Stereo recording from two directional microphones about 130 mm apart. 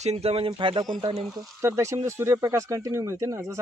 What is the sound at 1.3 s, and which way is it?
Speech, 20° right (ahead or behind).